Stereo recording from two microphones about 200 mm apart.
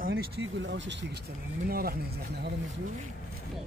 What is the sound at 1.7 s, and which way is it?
Speech, 50° right (ahead or behind).